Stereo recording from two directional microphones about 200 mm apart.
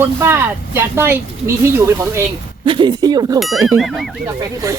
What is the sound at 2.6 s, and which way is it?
Speech, 25° right (ahead or behind).